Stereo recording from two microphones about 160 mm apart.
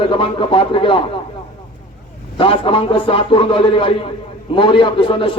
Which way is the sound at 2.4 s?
35° left (ahead or behind).